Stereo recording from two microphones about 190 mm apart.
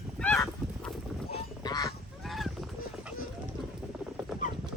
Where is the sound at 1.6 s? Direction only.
20° left (ahead or behind).